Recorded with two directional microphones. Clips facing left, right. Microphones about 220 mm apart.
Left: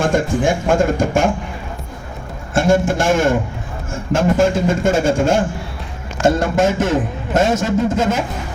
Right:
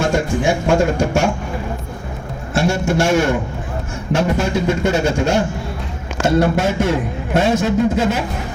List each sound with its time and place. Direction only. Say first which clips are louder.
0.0 s a man's voice: left 1 dB; 50° left (ahead or behind)
2.6 s a man's voice: left 2 dB; 50° left (ahead or behind)